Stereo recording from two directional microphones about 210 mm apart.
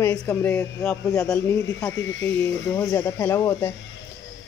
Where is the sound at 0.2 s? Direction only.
10° left (ahead or behind).